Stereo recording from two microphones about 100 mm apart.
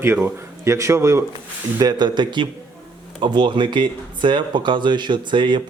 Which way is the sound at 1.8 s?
45° right (ahead or behind).